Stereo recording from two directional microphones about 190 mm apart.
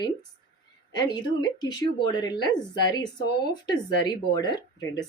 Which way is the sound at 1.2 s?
20° left (ahead or behind).